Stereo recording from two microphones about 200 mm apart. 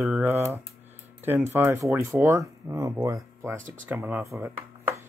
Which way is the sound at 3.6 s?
40° right (ahead or behind).